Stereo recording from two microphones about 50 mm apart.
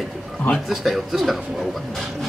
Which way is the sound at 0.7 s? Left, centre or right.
Centre.